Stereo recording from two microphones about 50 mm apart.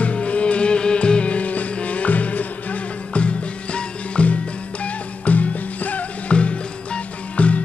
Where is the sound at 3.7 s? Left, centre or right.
Left.